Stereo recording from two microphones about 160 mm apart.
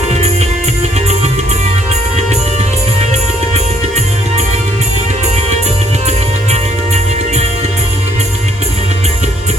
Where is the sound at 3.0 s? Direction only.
45° right (ahead or behind).